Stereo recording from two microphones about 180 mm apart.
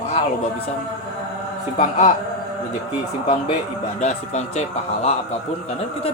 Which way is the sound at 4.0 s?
40° left (ahead or behind).